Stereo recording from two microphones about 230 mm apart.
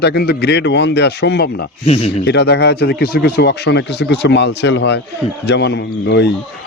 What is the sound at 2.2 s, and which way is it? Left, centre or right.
Speech, left.